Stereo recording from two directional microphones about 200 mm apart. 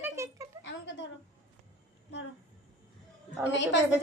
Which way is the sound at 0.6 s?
65° left (ahead or behind).